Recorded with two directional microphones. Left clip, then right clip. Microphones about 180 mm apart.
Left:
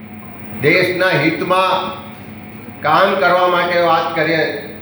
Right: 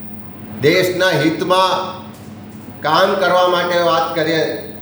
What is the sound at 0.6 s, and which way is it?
A man's voice, 20° right (ahead or behind).